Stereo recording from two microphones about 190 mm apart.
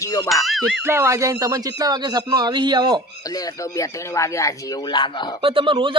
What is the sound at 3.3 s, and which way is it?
Speech, 20° left (ahead or behind).